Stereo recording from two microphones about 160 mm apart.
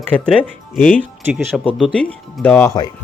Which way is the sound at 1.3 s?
5° right (ahead or behind).